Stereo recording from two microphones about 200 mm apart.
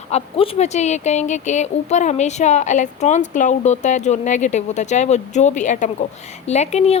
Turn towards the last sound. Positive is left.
turn(degrees=35)  # may be behind; listen again after turning